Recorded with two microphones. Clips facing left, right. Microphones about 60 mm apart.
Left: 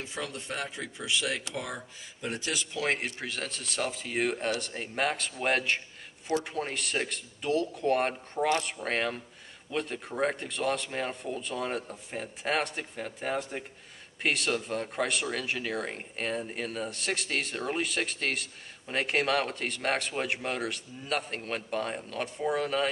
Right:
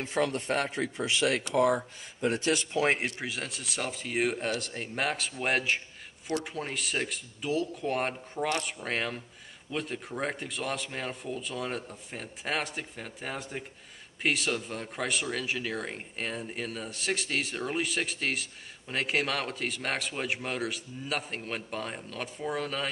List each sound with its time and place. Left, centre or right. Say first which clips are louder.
0.0 s a man's voice: right 8 dB; right
2.8 s speech: left 1 dB; centre
3.3 s speech: even; centre